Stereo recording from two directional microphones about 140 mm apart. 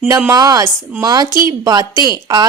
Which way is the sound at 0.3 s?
25° right (ahead or behind).